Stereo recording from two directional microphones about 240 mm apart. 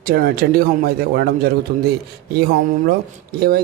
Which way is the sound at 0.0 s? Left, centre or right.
Right.